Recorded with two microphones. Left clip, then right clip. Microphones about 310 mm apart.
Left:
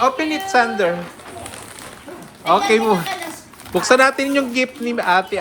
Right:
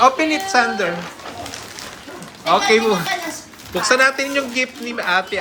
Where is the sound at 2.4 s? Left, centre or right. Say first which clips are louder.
Even; centre.